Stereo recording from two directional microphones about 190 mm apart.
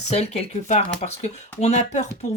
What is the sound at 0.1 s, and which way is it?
Speech, 35° left (ahead or behind).